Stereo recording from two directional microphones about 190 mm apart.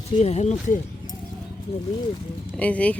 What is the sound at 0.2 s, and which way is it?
Speech, 35° left (ahead or behind).